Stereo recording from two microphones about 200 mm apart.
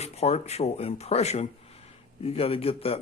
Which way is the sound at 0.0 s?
30° left (ahead or behind).